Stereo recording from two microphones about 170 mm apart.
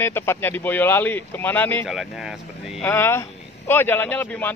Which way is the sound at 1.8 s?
Centre (ahead or behind).